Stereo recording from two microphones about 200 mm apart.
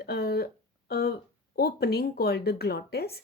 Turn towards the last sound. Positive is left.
turn(degrees=50)  # may be behind; listen again after turning